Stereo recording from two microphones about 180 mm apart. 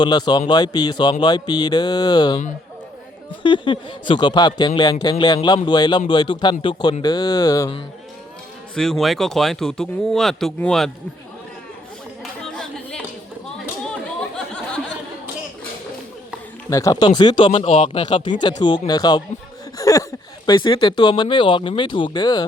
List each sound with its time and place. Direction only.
0.0 s speech: 25° left (ahead or behind)
3.4 s speech: 30° left (ahead or behind)
8.7 s speech: centre (ahead or behind)
12.2 s clapping: 5° left (ahead or behind)
14.3 s a sound: 5° left (ahead or behind)
16.6 s speech: 15° left (ahead or behind)